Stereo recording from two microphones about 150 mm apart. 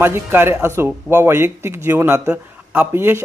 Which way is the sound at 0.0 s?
15° right (ahead or behind).